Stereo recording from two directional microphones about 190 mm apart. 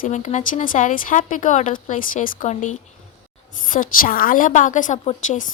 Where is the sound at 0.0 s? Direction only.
40° left (ahead or behind).